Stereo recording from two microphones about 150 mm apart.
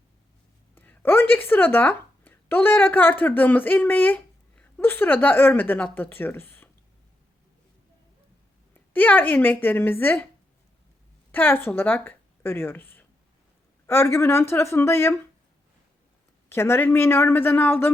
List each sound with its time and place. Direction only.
0.8 s speech: 15° left (ahead or behind)
8.9 s speech: 10° left (ahead or behind)
11.3 s speech: 15° left (ahead or behind)
16.5 s speech: 15° left (ahead or behind)